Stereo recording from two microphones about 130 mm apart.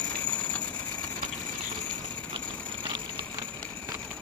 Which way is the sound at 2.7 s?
40° right (ahead or behind).